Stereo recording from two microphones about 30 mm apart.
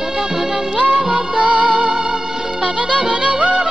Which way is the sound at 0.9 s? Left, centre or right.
Right.